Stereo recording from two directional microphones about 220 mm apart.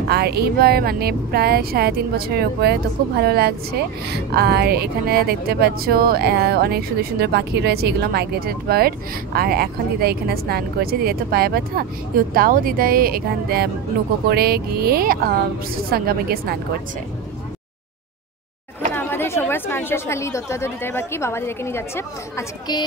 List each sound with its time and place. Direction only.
0.1 s speech: 45° right (ahead or behind)
18.9 s speech: 10° left (ahead or behind)